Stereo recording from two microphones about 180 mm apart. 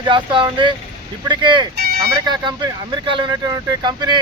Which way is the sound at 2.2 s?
25° right (ahead or behind).